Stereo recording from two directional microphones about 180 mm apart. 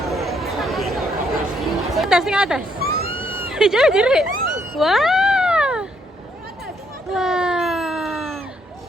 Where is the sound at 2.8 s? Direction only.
60° right (ahead or behind).